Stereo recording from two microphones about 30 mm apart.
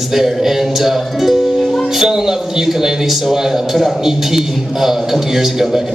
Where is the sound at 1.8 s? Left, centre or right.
Centre.